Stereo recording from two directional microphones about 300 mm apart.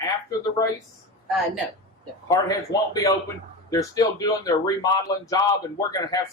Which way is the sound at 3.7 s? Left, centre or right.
Centre.